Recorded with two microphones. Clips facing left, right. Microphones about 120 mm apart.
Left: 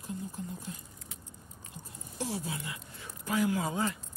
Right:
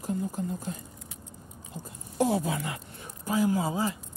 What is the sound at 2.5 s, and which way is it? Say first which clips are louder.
Speech: right 7 dB; 70° right (ahead or behind).